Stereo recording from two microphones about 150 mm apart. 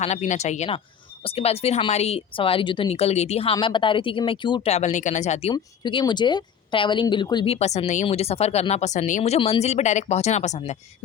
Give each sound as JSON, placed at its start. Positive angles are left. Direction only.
{"t": 0.0, "sound": "a woman's voice", "side_deg": 50}
{"t": 4.7, "sound": "speech", "side_deg": 50}
{"t": 5.8, "sound": "a woman's voice", "side_deg": 30}